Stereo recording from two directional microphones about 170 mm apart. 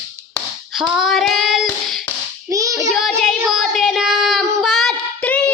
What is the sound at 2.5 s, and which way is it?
Hands, 20° right (ahead or behind).